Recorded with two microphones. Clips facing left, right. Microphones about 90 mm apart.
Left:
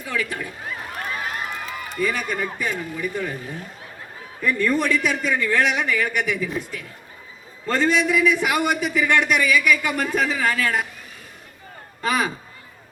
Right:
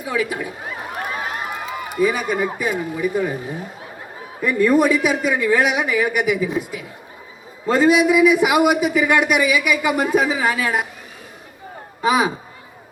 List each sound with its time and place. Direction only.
0.0 s a sound: 10° right (ahead or behind)
2.6 s a man's voice: 10° right (ahead or behind)
12.0 s a man's voice: 10° right (ahead or behind)